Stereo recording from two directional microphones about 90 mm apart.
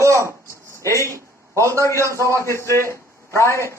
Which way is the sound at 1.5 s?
35° right (ahead or behind).